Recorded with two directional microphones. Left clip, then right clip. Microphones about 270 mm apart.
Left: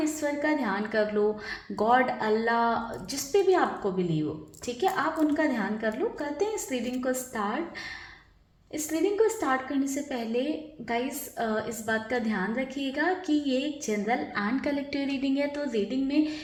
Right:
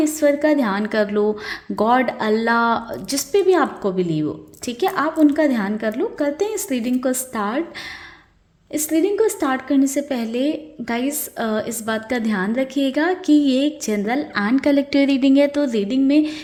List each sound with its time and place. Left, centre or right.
0.0 s a woman's voice: right
8.7 s a woman's voice: right